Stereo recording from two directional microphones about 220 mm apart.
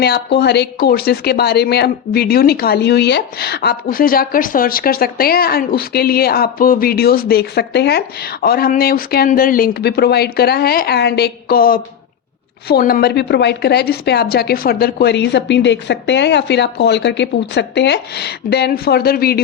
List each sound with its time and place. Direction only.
0.0 s speech: 50° left (ahead or behind)